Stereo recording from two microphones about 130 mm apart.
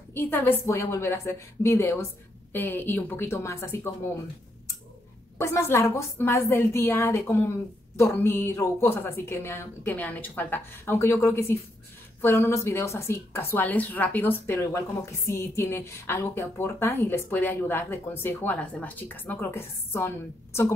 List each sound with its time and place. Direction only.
0.1 s a woman's voice: 15° left (ahead or behind)
5.4 s a woman's voice: 20° left (ahead or behind)